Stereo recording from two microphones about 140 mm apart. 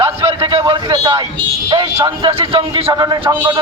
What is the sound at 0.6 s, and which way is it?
A man's voice, 30° right (ahead or behind).